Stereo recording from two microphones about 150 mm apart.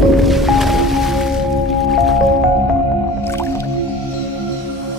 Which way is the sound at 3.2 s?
15° left (ahead or behind).